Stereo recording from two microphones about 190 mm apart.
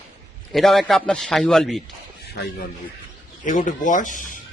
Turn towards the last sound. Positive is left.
turn(degrees=45)  # may be behind; listen again after turning